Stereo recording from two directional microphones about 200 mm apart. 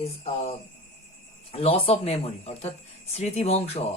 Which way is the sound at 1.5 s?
30° left (ahead or behind).